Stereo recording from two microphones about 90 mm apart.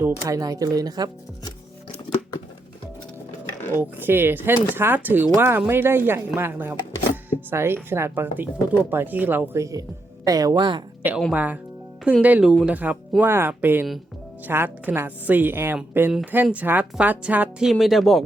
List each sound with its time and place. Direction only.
0.3 s speech: 40° right (ahead or behind)
3.8 s a woman's voice: 25° right (ahead or behind); by 10.8 s 55° right (ahead or behind)
11.0 s a woman's voice: 20° right (ahead or behind); by 12.7 s 5° right (ahead or behind)
12.7 s speech: 15° right (ahead or behind)
13.2 s a woman's voice: 25° right (ahead or behind)
17.6 s speech: centre (ahead or behind)